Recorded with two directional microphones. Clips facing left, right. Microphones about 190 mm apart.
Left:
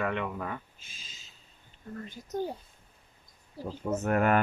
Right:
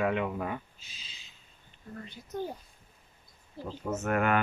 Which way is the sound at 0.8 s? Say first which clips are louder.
Even; 50° left (ahead or behind).